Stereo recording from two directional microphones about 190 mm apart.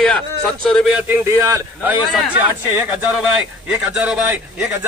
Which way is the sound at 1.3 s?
15° right (ahead or behind).